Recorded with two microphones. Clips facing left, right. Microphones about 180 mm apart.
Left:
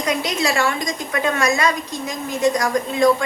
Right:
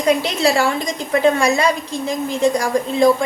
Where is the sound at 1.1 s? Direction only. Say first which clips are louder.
Right 6 dB; 30° right (ahead or behind).